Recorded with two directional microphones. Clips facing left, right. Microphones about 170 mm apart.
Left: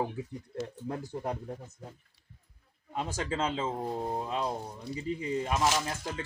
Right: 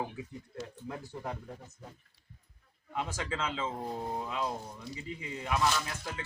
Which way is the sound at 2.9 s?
35° left (ahead or behind).